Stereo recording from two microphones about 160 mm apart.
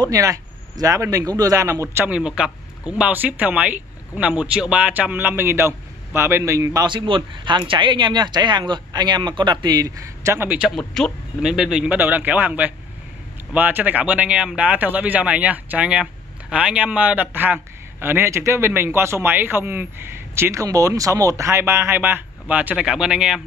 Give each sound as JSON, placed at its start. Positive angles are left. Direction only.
{"t": 0.0, "sound": "a man's voice", "side_deg": -20}
{"t": 10.8, "sound": "a man's voice", "side_deg": 5}